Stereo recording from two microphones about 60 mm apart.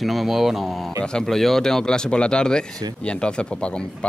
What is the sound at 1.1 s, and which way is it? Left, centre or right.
Speech, centre.